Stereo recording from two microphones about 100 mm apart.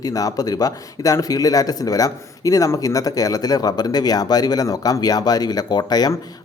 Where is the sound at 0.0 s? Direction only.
35° left (ahead or behind).